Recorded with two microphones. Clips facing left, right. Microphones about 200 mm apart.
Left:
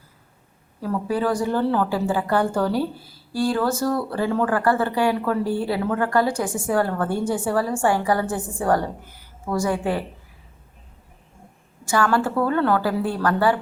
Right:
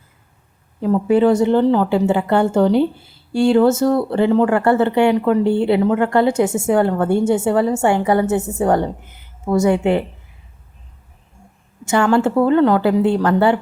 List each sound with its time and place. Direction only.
0.8 s a woman's voice: 20° right (ahead or behind)
11.9 s a woman's voice: 20° right (ahead or behind)